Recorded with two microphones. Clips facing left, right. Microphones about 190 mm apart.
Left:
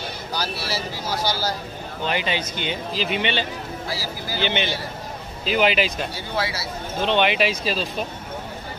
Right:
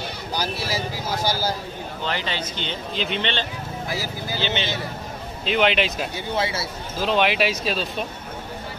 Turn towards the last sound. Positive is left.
turn(degrees=0)  # may be behind; listen again after turning